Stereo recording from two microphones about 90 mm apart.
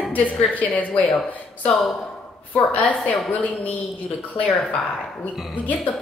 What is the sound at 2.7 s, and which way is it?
Speech, 15° left (ahead or behind).